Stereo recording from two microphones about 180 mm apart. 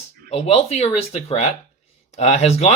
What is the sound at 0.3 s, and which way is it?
Speech, 35° left (ahead or behind).